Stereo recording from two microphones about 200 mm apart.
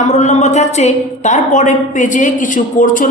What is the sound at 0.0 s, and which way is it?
A woman's voice, 35° left (ahead or behind).